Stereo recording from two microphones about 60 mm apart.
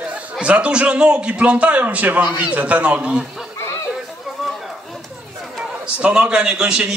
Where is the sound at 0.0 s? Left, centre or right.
Right.